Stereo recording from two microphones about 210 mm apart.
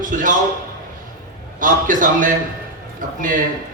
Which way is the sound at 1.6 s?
40° right (ahead or behind).